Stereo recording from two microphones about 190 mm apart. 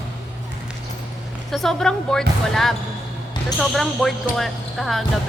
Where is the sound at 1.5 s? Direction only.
Centre (ahead or behind).